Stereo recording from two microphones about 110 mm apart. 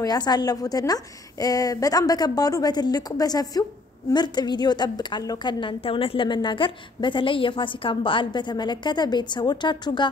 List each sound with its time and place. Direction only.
0.0 s a woman's voice: 40° left (ahead or behind)